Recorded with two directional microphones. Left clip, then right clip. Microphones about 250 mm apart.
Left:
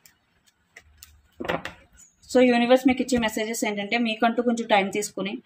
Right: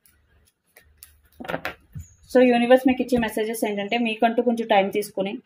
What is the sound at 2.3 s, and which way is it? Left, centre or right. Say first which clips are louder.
A woman's voice: right 2 dB; centre.